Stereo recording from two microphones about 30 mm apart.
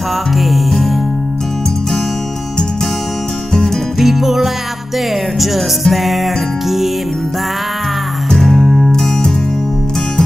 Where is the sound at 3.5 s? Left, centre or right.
Centre.